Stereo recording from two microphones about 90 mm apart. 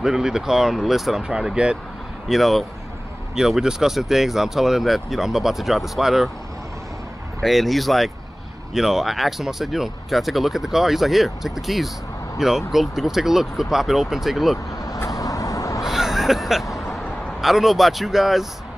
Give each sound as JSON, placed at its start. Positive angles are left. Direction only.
{"t": 0.0, "sound": "speech", "side_deg": -5}
{"t": 7.4, "sound": "speech", "side_deg": 0}
{"t": 15.1, "sound": "vehicle", "side_deg": 40}
{"t": 15.8, "sound": "vehicle", "side_deg": -5}
{"t": 16.9, "sound": "speech", "side_deg": 0}